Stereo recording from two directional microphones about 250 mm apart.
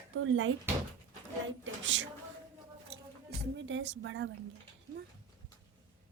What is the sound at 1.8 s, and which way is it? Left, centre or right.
A woman's voice, right.